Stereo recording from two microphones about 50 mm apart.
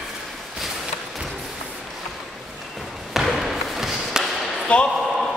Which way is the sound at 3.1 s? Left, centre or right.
Centre.